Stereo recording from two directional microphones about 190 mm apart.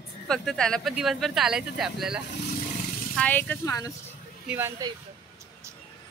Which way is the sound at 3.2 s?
10° left (ahead or behind).